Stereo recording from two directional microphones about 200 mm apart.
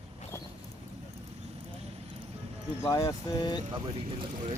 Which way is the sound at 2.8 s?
15° left (ahead or behind).